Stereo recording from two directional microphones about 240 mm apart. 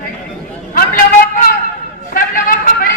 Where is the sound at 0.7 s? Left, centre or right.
Left.